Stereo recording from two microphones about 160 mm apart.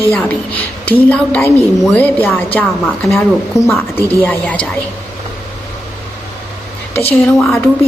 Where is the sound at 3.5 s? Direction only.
45° left (ahead or behind).